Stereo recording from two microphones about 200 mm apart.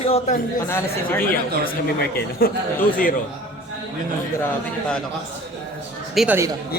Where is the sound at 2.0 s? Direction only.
50° left (ahead or behind).